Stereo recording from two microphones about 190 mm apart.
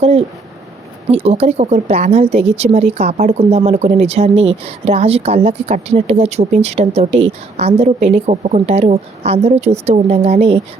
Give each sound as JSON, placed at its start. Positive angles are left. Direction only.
{"t": 0.0, "sound": "speech", "side_deg": -35}